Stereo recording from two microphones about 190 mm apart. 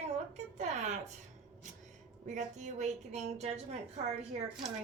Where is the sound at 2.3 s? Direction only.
40° right (ahead or behind).